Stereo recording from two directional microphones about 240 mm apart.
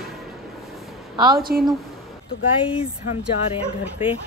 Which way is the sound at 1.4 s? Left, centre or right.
Right.